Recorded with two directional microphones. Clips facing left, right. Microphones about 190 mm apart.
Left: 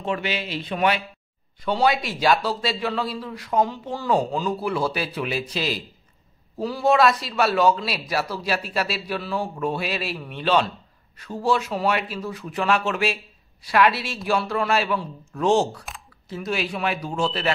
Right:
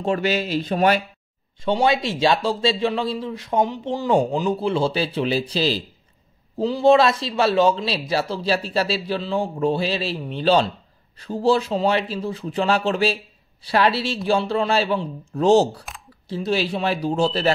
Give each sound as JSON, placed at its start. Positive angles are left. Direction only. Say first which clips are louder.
{"t": 0.0, "sound": "speech", "louder": "right 5 dB", "side_deg": -40}
{"t": 1.6, "sound": "speech", "louder": "right 2 dB", "side_deg": -25}